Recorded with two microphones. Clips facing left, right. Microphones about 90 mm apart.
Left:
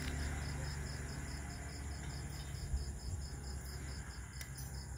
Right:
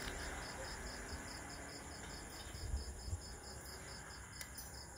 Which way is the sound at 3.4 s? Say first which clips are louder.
Left 1 dB; 15° right (ahead or behind).